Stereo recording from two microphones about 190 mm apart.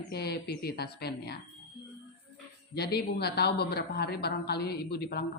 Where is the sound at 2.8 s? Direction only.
60° left (ahead or behind).